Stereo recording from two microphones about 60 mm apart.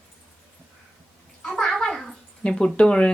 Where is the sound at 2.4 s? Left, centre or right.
Centre.